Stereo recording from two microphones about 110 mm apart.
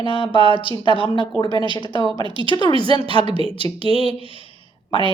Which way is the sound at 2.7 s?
55° right (ahead or behind).